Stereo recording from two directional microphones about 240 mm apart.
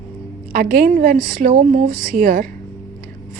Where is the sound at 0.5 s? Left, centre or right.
Right.